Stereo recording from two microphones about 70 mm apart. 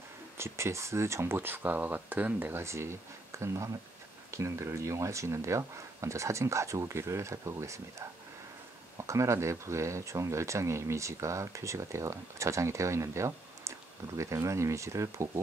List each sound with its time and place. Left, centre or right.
0.4 s speech: right
2.6 s speech: right